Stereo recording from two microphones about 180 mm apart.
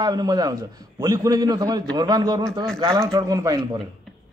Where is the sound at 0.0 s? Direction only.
25° right (ahead or behind).